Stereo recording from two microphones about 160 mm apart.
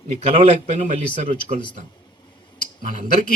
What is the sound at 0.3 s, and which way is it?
Speech, 45° right (ahead or behind).